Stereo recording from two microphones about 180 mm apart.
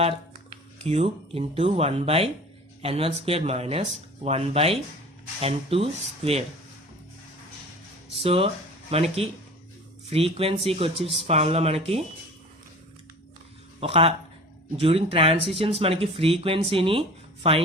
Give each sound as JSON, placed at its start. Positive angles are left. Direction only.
{"t": 0.8, "sound": "speech", "side_deg": -35}
{"t": 8.1, "sound": "speech", "side_deg": -35}
{"t": 13.7, "sound": "speech", "side_deg": -35}